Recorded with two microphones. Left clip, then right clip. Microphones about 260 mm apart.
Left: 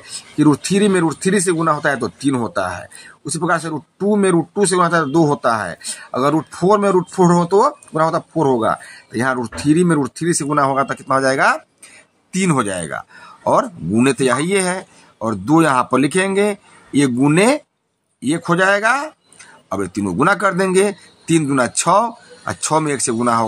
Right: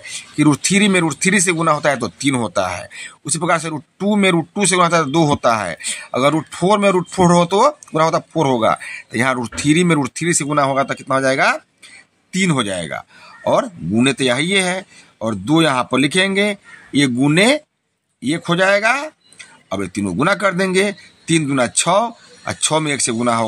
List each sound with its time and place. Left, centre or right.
0.4 s speech: centre